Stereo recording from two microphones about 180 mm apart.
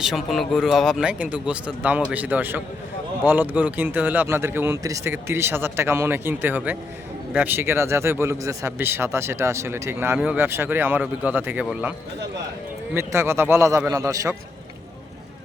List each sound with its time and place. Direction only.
0.0 s a man's voice: centre (ahead or behind)
12.9 s a man's voice: 15° right (ahead or behind)